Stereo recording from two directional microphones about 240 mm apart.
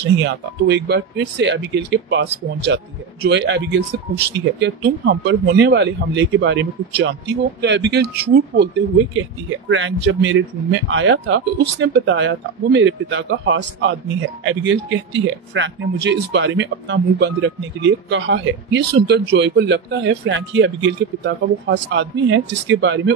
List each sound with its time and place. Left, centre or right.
0.0 s speech: right